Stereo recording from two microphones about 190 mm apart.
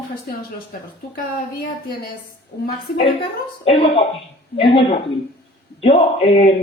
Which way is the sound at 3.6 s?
30° left (ahead or behind).